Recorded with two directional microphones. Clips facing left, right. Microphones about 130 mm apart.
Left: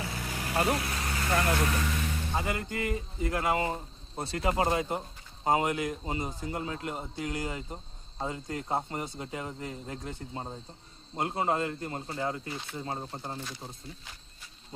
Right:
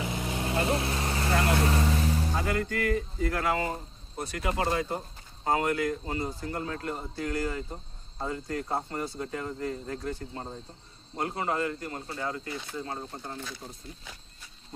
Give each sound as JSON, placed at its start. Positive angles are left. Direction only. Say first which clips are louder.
{"t": 0.0, "sound": "vehicle", "louder": "right 4 dB", "side_deg": -20}
{"t": 2.3, "sound": "a man's voice", "louder": "right 3 dB", "side_deg": 20}